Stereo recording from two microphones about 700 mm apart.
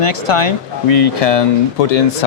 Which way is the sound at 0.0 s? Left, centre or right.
Left.